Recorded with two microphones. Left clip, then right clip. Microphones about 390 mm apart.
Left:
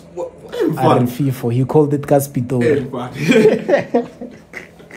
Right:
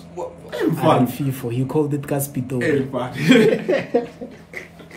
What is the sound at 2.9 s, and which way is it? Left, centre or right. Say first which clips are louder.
Speech: left 1 dB; centre.